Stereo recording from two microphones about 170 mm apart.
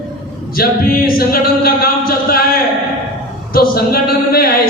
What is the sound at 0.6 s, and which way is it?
A capella, 60° left (ahead or behind).